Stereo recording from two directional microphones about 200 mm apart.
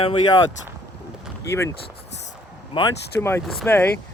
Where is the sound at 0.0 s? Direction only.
25° left (ahead or behind).